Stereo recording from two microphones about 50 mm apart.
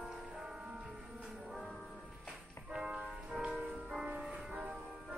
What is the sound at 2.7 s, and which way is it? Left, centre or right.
Music, right.